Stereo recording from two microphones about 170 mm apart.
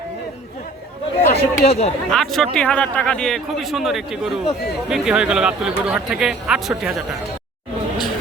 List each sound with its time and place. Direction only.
1.4 s speech: 40° left (ahead or behind)
2.0 s a man's voice: centre (ahead or behind)